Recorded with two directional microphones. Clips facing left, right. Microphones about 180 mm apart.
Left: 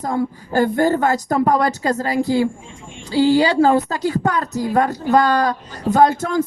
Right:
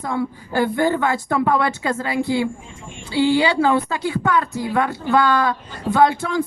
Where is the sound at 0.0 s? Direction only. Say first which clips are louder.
Left 2 dB; 45° left (ahead or behind).